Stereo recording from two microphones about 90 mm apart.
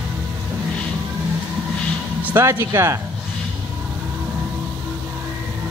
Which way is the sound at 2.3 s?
30° right (ahead or behind).